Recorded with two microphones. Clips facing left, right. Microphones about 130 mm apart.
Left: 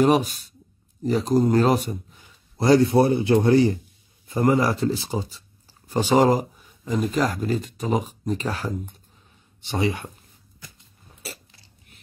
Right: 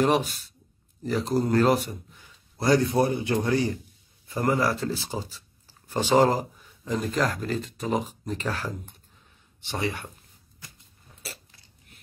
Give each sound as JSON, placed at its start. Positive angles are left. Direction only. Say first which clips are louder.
{"t": 1.0, "sound": "a man's voice", "louder": "left 5 dB", "side_deg": 15}